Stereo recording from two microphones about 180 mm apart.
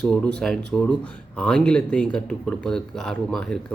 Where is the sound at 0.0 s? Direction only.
5° left (ahead or behind).